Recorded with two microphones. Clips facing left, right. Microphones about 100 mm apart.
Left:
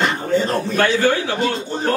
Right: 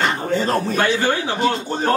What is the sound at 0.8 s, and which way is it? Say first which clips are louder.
Speech: left 2 dB; 15° right (ahead or behind).